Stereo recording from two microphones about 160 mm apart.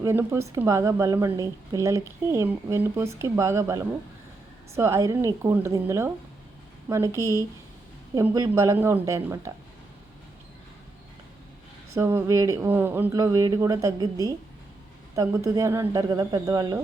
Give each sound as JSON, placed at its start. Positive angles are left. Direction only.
{"t": 0.0, "sound": "a woman's voice", "side_deg": -15}
{"t": 11.9, "sound": "a woman's voice", "side_deg": -15}
{"t": 13.1, "sound": "speech", "side_deg": -25}